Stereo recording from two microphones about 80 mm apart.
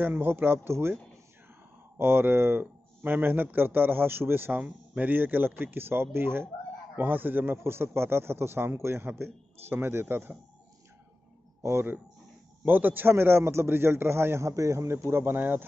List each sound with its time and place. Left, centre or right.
0.0 s speech: right
2.0 s speech: right
11.6 s a man's voice: right